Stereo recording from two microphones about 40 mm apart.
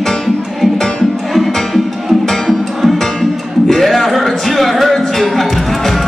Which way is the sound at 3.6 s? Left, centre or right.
Centre.